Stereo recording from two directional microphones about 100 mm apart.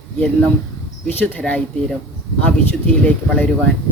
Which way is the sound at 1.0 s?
15° left (ahead or behind).